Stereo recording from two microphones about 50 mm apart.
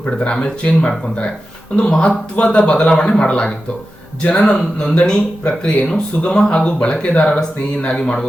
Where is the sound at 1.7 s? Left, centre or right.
Left.